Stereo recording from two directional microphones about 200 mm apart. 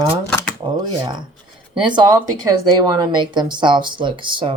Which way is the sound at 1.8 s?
20° right (ahead or behind).